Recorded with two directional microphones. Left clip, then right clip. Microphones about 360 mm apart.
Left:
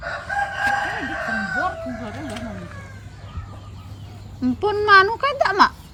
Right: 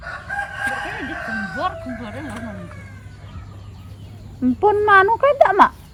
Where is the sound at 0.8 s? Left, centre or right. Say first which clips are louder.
Left 2 dB; left.